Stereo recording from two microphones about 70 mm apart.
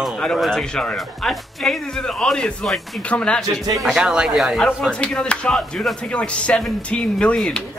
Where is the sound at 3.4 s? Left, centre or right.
Right.